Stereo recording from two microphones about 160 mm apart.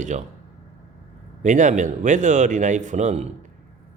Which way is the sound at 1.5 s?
50° right (ahead or behind).